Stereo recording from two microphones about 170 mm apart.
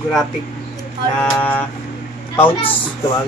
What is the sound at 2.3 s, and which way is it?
Speech, 30° left (ahead or behind).